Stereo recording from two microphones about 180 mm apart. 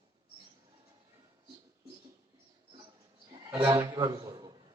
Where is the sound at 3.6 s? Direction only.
15° right (ahead or behind).